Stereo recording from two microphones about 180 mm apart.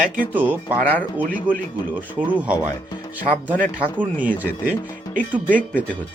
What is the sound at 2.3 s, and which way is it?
Speech, 10° right (ahead or behind).